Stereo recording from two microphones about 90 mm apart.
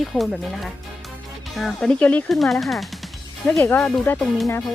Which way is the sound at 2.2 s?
Centre (ahead or behind).